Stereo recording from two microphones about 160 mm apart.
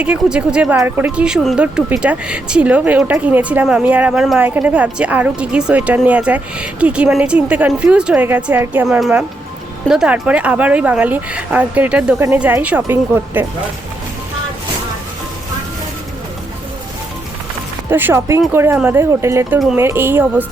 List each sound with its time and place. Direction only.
0.0 s speech: 5° right (ahead or behind)
17.8 s speech: 15° right (ahead or behind)